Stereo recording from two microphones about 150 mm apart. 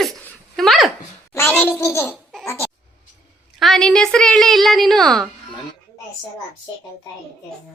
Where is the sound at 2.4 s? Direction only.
20° left (ahead or behind).